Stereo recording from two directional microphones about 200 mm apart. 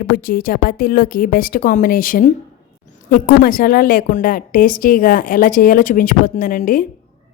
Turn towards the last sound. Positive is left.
turn(degrees=45)  # may be behind; listen again after turning